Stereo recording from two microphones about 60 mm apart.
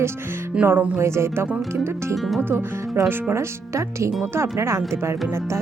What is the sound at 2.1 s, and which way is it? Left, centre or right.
Speech, centre.